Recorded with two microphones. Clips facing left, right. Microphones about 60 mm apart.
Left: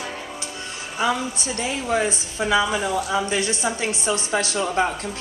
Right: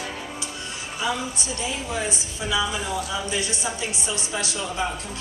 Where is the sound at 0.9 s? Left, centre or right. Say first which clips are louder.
Left 4 dB; left.